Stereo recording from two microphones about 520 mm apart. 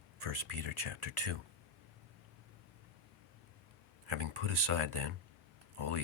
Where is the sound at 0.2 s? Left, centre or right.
Right.